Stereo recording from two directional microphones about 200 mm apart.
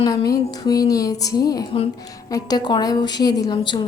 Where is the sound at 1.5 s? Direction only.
20° left (ahead or behind).